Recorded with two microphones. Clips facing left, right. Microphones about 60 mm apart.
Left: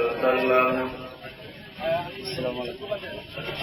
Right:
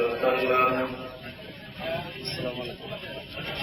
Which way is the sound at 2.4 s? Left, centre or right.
Centre.